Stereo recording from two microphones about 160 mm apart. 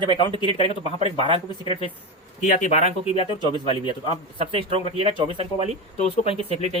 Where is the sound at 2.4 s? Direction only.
50° left (ahead or behind).